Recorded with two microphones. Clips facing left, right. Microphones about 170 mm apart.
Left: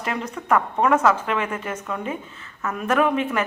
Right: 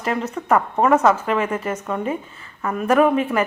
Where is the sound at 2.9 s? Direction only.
40° right (ahead or behind).